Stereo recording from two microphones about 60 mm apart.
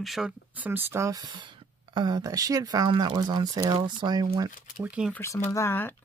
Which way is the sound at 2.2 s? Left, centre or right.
Right.